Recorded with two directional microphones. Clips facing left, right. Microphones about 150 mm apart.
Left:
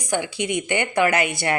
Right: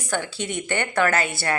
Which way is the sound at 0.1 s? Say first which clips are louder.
Left 4 dB; 15° left (ahead or behind).